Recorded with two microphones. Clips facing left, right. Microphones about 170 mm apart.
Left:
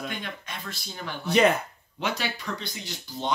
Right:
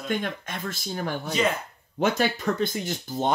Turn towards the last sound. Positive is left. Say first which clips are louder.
# right 4 dB
turn(degrees=-50)  # may be behind; listen again after turning